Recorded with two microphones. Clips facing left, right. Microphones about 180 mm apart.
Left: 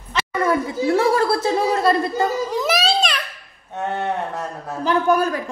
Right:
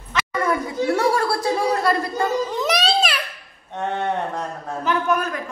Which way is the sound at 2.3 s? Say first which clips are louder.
Left 1 dB; centre (ahead or behind).